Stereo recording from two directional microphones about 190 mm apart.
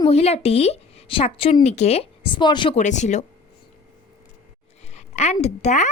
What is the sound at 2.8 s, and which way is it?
Speech, 40° left (ahead or behind).